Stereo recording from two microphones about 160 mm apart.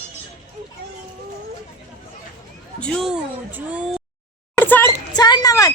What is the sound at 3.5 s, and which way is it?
Speech, 10° right (ahead or behind).